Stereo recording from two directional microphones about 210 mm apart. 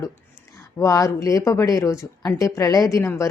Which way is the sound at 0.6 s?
15° left (ahead or behind).